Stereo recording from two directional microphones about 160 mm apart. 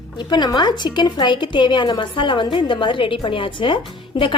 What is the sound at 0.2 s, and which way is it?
A woman's voice, 30° left (ahead or behind).